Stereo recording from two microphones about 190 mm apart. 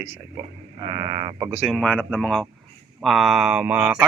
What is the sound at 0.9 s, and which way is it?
Speech, 25° right (ahead or behind).